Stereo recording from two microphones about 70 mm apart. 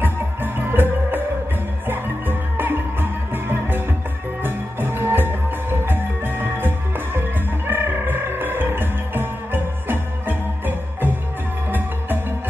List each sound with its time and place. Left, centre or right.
0.0 s music: right
11.7 s music: right